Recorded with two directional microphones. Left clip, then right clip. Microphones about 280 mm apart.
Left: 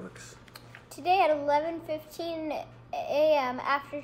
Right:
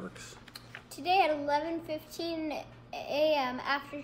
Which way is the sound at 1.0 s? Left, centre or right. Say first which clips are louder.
Left 3 dB; centre.